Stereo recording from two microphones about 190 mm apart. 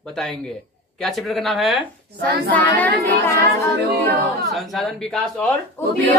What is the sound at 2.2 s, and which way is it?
Child singing, 50° right (ahead or behind).